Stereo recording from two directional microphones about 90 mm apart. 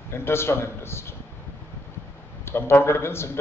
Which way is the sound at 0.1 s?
30° left (ahead or behind).